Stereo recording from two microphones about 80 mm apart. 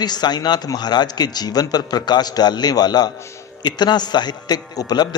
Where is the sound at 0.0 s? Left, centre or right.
Left.